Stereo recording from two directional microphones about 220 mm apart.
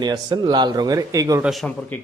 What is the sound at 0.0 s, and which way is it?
A man's voice, 20° right (ahead or behind).